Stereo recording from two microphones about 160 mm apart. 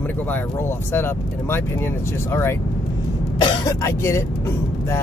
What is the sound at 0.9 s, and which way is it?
Speech, 15° left (ahead or behind).